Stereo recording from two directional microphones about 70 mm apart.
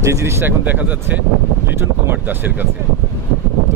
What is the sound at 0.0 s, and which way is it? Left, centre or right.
Speech, right.